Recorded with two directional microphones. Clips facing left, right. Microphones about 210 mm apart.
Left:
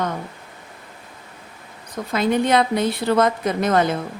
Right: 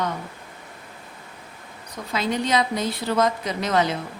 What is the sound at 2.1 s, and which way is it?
A woman's voice, 55° left (ahead or behind).